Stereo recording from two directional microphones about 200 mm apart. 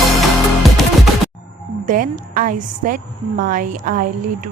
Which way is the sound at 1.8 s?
40° right (ahead or behind).